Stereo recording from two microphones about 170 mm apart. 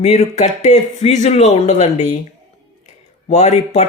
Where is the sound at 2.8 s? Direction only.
45° left (ahead or behind).